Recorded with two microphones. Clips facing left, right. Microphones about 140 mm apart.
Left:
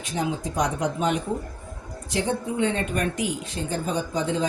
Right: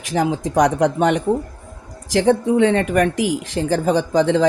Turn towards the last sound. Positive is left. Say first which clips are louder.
# right 10 dB
turn(degrees=-90)